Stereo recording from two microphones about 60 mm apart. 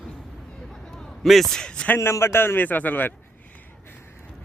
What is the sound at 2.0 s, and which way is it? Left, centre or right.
A man's voice, left.